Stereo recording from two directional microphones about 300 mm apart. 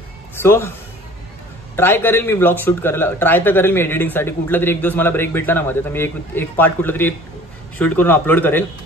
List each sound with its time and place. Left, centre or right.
0.4 s speech: centre
1.8 s speech: centre